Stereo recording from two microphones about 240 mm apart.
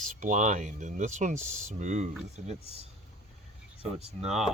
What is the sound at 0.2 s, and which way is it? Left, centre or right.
Speech, right.